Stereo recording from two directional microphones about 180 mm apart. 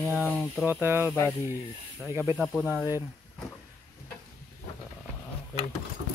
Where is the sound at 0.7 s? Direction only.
10° right (ahead or behind).